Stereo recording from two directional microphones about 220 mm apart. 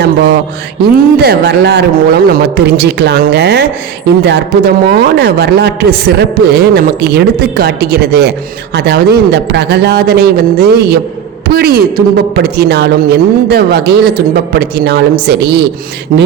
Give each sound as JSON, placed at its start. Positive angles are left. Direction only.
{"t": 1.2, "sound": "speech", "side_deg": -45}